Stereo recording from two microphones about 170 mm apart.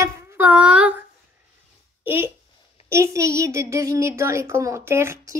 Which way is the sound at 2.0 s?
10° right (ahead or behind).